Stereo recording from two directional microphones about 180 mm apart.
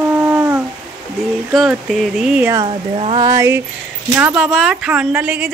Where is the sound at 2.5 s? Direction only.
30° right (ahead or behind).